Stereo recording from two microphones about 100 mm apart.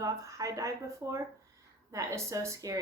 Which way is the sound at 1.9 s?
30° right (ahead or behind).